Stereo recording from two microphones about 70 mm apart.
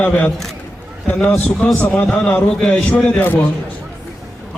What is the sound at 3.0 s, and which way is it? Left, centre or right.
Speech, left.